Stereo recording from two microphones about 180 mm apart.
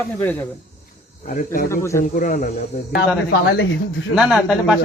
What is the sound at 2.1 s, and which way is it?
Speech, 50° left (ahead or behind).